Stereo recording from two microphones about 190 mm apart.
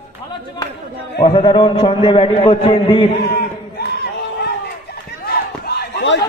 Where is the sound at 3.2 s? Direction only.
55° left (ahead or behind).